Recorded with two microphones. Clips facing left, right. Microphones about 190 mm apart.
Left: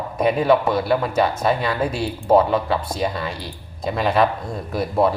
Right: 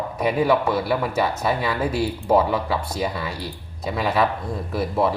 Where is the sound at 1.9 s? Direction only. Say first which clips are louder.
Left 2 dB; 25° left (ahead or behind).